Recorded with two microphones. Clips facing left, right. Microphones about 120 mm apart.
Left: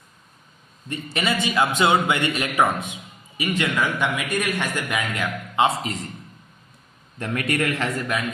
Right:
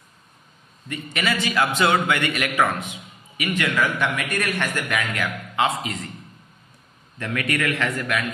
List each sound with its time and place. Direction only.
0.9 s a man's voice: 25° left (ahead or behind)
7.2 s a man's voice: 40° left (ahead or behind)